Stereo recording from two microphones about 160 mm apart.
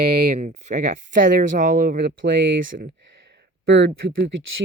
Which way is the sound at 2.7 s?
90° right.